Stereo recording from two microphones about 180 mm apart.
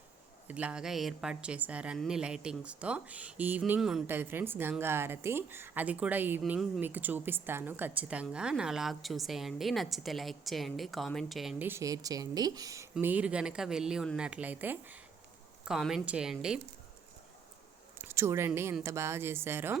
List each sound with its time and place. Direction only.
0.4 s a woman's voice: 5° right (ahead or behind)
11.7 s a woman's voice: 20° right (ahead or behind); by 16.6 s 5° right (ahead or behind)
17.9 s a woman's voice: 15° right (ahead or behind)